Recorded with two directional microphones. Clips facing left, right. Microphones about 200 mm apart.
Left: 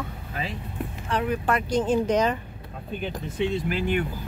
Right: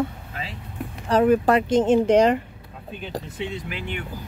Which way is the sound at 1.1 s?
40° right (ahead or behind).